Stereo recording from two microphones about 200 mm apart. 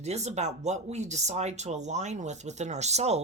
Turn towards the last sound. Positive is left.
turn(degrees=-35)  # may be behind; listen again after turning